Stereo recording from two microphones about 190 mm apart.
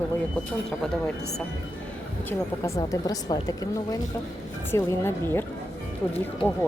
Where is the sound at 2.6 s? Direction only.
15° left (ahead or behind).